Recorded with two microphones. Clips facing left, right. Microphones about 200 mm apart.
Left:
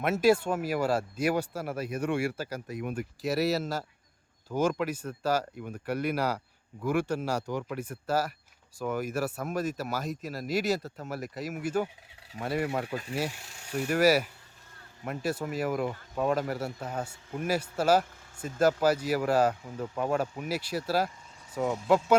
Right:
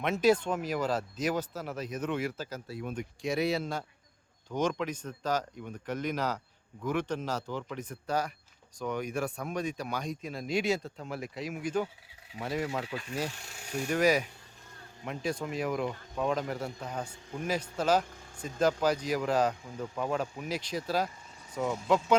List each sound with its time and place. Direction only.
0.0 s speech: 5° left (ahead or behind)
2.9 s speech: 5° left (ahead or behind)
12.3 s speech: 50° left (ahead or behind)
12.8 s speech: 45° left (ahead or behind)
13.9 s speech: 5° left (ahead or behind)